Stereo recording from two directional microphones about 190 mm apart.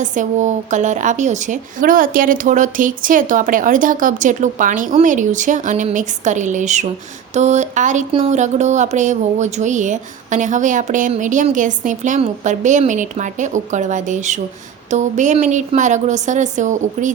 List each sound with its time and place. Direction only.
0.0 s speech: 40° right (ahead or behind)